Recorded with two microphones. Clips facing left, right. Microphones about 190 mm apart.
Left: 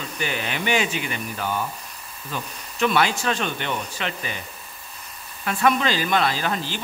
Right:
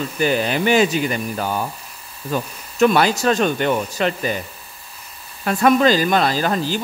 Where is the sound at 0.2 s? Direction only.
40° right (ahead or behind).